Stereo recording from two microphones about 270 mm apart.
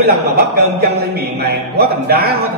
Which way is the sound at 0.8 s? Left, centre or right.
Right.